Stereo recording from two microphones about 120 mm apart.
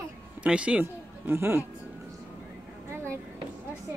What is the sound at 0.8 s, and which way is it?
Speech, 20° right (ahead or behind).